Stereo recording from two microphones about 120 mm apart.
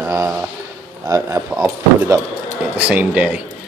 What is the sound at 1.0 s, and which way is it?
Speech, 30° right (ahead or behind).